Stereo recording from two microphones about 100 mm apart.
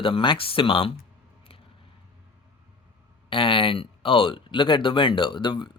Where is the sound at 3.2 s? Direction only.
60° left (ahead or behind).